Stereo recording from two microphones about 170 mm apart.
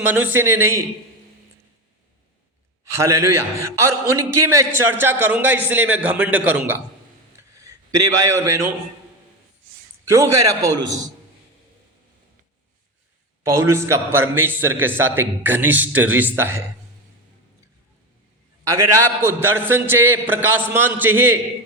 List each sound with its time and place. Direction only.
0.0 s a man's voice: 10° right (ahead or behind)
2.9 s a man's voice: 15° right (ahead or behind)
10.1 s a man's voice: 15° right (ahead or behind)
13.4 s a man's voice: 15° right (ahead or behind)
18.7 s a man's voice: 15° right (ahead or behind)